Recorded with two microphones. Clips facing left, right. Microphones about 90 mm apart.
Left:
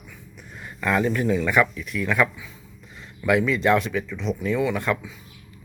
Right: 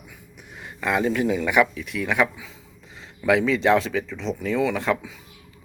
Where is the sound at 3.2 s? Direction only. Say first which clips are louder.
Right 1 dB; 25° right (ahead or behind).